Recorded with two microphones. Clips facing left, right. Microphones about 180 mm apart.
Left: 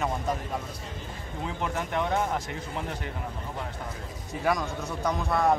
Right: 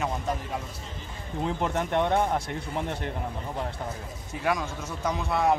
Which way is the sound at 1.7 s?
30° right (ahead or behind).